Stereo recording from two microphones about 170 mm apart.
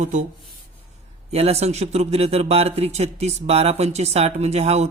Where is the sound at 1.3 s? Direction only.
40° right (ahead or behind).